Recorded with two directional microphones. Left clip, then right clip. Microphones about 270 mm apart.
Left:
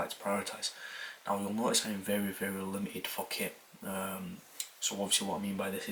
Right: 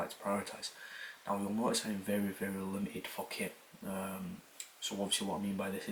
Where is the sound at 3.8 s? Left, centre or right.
Centre.